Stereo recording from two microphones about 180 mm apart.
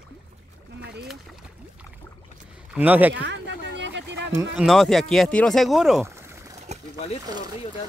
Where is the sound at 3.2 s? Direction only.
75° right (ahead or behind).